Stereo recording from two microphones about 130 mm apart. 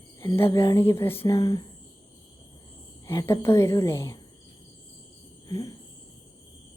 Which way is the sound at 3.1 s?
25° left (ahead or behind).